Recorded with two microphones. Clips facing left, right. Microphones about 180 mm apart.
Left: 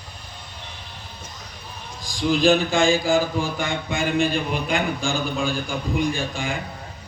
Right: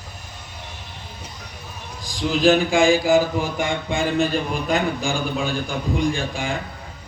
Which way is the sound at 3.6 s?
25° right (ahead or behind).